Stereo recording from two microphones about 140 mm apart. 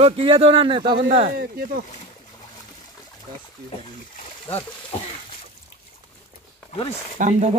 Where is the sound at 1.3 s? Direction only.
90° right.